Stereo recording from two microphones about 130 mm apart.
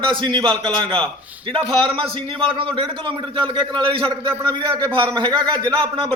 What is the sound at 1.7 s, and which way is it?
A man's voice, 40° right (ahead or behind).